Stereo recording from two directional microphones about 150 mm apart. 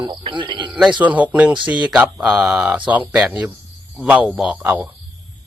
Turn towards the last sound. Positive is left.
turn(degrees=-10)  # may be behind; listen again after turning